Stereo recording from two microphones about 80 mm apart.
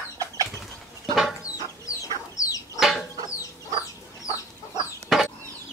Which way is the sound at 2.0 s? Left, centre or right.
Left.